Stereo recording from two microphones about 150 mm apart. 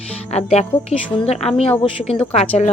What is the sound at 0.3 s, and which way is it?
A woman's voice, 45° left (ahead or behind).